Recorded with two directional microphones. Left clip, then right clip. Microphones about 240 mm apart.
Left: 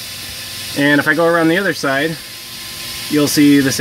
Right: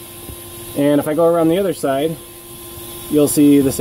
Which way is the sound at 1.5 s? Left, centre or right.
Centre.